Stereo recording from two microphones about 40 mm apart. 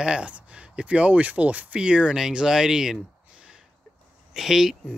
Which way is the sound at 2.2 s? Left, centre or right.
Centre.